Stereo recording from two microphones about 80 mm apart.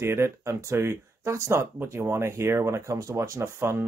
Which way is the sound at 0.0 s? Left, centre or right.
Right.